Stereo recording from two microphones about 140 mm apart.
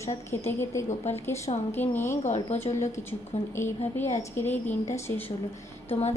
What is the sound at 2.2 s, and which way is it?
A woman's voice, 50° left (ahead or behind).